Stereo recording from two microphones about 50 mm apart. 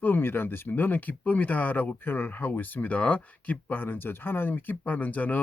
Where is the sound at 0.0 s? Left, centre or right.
Left.